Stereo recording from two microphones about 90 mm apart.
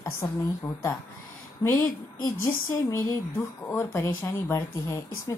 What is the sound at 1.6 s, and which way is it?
Speech, 50° left (ahead or behind).